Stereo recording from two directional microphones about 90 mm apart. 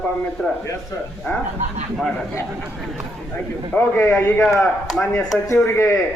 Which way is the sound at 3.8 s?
25° left (ahead or behind).